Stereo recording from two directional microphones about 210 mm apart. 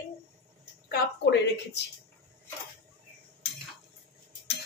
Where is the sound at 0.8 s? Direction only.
50° left (ahead or behind).